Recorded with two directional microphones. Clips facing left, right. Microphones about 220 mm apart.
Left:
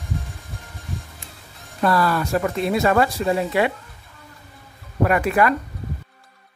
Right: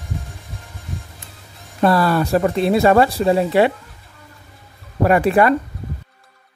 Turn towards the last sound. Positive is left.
turn(degrees=-30)  # may be behind; listen again after turning